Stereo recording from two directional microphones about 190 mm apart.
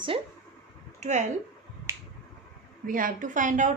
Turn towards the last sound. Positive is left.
turn(degrees=-40)  # may be behind; listen again after turning